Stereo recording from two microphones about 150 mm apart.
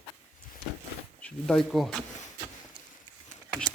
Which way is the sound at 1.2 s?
5° left (ahead or behind).